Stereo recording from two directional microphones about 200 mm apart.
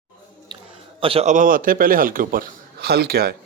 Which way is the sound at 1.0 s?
30° right (ahead or behind).